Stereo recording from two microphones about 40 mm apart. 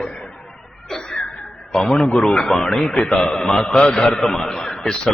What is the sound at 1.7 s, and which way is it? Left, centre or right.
A man's voice, centre.